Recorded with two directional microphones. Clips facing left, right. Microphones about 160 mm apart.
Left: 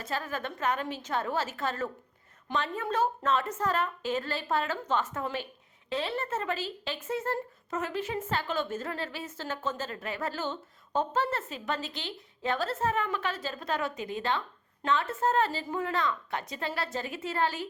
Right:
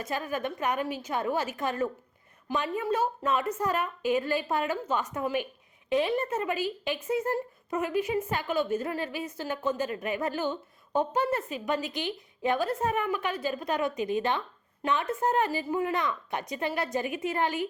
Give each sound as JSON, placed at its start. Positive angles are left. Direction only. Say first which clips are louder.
{"t": 0.0, "sound": "speech", "louder": "right 3 dB", "side_deg": -15}